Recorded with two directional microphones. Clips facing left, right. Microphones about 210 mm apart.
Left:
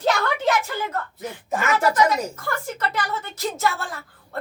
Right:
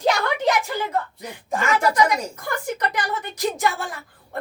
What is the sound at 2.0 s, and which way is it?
A woman's voice, 15° right (ahead or behind).